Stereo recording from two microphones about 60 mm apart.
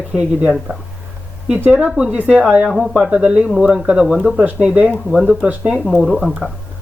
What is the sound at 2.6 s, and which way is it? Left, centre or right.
Speech, centre.